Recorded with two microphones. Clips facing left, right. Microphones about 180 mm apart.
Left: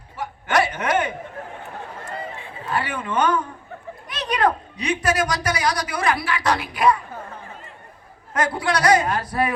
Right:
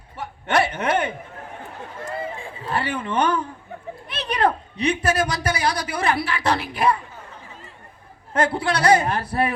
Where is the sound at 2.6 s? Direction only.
30° right (ahead or behind).